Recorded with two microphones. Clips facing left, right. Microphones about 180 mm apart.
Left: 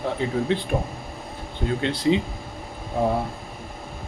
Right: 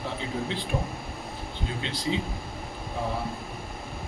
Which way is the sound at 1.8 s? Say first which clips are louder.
Left 9 dB; 65° left (ahead or behind).